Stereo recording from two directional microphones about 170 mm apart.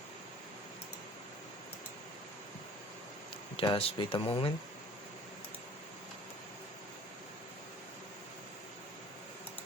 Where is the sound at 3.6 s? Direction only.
35° left (ahead or behind).